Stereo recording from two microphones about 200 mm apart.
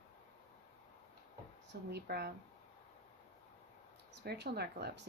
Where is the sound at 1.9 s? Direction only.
55° right (ahead or behind).